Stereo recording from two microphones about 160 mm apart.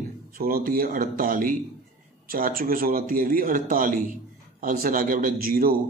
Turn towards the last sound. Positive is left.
turn(degrees=-65)  # may be behind; listen again after turning